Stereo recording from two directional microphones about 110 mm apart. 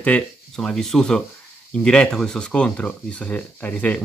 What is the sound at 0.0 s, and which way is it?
Speech, 10° left (ahead or behind).